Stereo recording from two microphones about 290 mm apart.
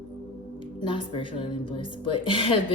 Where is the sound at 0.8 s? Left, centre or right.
Centre.